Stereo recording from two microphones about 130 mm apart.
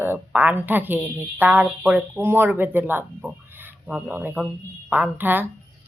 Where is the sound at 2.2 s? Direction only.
15° right (ahead or behind).